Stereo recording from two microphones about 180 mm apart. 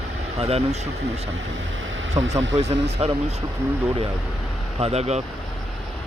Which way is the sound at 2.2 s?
20° right (ahead or behind).